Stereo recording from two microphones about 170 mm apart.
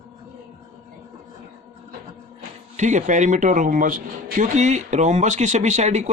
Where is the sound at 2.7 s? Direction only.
45° right (ahead or behind).